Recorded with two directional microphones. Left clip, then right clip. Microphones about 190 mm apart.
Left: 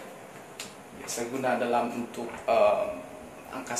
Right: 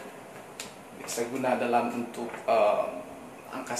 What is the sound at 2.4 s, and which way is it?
Speech, 10° left (ahead or behind).